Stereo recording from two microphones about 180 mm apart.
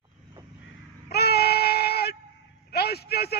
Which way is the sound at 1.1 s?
65° left (ahead or behind).